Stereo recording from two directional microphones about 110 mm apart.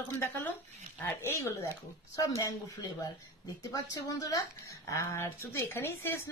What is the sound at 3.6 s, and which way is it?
Speech, 35° left (ahead or behind).